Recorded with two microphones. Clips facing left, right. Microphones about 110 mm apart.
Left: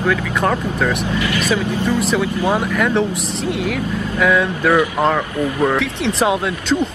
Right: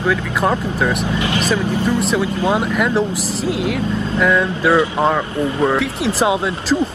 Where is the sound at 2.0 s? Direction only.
5° right (ahead or behind).